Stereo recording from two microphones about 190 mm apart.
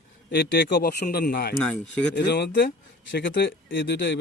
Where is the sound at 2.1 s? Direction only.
60° left (ahead or behind).